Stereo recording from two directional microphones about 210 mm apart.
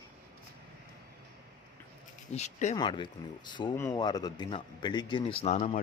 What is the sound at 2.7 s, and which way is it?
A man's voice, 20° left (ahead or behind).